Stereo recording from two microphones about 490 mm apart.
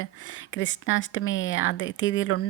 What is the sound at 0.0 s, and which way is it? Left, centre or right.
Speech, left.